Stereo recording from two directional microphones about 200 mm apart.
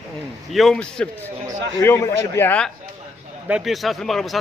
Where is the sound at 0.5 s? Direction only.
Centre (ahead or behind).